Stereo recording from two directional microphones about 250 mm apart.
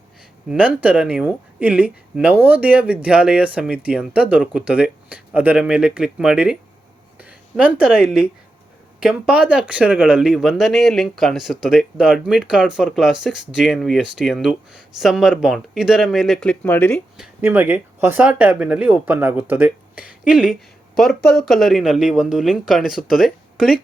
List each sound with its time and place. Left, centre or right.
0.4 s a woman's voice: centre
17.4 s speech: centre